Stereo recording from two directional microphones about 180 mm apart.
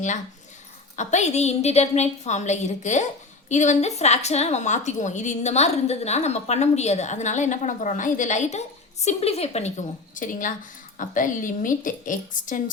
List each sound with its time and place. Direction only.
0.9 s a woman's voice: 40° left (ahead or behind)
10.2 s a woman's voice: 45° left (ahead or behind)